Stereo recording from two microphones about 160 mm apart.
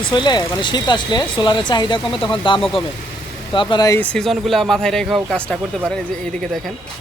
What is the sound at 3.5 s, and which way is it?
Speech, 25° left (ahead or behind).